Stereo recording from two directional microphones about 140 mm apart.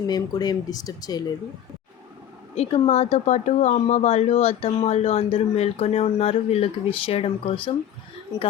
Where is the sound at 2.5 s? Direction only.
50° left (ahead or behind).